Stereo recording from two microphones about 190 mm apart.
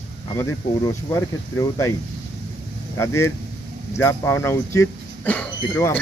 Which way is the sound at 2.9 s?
15° left (ahead or behind).